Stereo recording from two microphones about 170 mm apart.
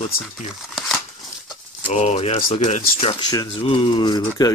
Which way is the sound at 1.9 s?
40° left (ahead or behind).